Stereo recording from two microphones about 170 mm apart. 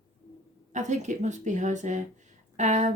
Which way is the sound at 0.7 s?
45° right (ahead or behind).